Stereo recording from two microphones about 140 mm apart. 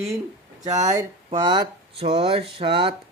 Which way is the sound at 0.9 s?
30° right (ahead or behind).